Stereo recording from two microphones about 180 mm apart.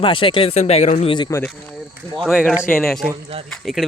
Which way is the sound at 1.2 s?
15° left (ahead or behind).